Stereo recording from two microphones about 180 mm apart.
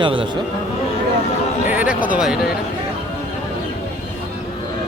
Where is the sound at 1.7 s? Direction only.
10° right (ahead or behind).